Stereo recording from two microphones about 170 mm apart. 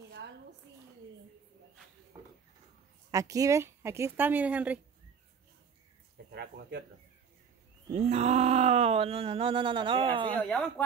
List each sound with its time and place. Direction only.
3.1 s speech: 20° right (ahead or behind)
6.3 s speech: 80° right
7.9 s groan: 40° right (ahead or behind)
10.3 s speech: 5° left (ahead or behind)